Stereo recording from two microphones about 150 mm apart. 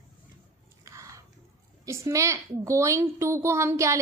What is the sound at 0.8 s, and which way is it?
Biting, 20° right (ahead or behind).